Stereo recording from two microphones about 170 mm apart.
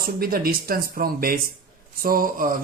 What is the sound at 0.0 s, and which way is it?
Speech, 60° right (ahead or behind).